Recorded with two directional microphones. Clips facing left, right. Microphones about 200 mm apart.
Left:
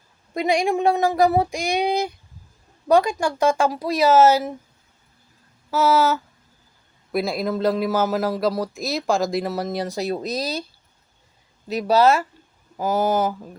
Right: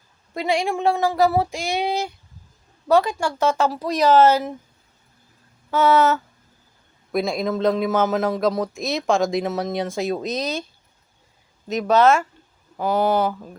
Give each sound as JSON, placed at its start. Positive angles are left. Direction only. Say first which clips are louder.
{"t": 0.3, "sound": "speech", "louder": "left 2 dB", "side_deg": 15}
{"t": 5.7, "sound": "speech", "louder": "right 1 dB", "side_deg": 0}
{"t": 11.7, "sound": "speech", "louder": "right 1 dB", "side_deg": 35}